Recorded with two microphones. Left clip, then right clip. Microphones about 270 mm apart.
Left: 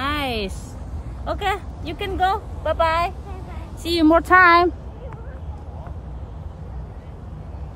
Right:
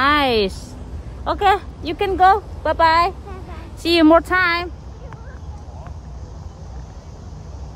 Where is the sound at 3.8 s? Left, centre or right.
Centre.